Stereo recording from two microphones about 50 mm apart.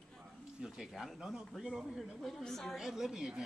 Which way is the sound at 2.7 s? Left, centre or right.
Centre.